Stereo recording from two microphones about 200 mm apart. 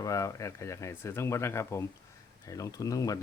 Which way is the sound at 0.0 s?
15° left (ahead or behind).